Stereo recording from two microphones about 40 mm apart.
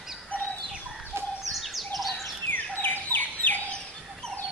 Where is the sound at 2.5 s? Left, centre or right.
Left.